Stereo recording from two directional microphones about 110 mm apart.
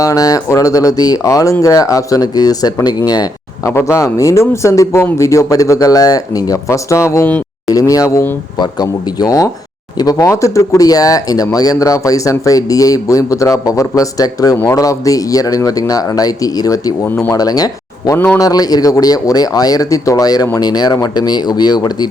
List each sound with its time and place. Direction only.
0.0 s speech: 30° left (ahead or behind)
3.7 s speech: 25° left (ahead or behind)